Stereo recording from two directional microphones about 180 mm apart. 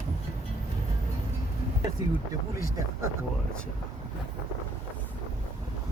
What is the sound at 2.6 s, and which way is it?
Speech, 20° right (ahead or behind).